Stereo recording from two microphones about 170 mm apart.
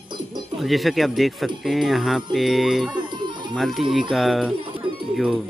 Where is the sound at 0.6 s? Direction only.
Centre (ahead or behind).